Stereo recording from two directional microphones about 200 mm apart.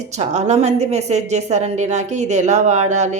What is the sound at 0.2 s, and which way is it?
A woman's voice, 35° right (ahead or behind).